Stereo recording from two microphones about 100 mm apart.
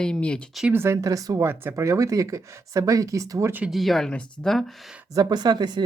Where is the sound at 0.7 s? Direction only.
25° right (ahead or behind).